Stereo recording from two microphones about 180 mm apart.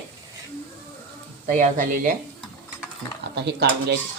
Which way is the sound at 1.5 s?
45° right (ahead or behind).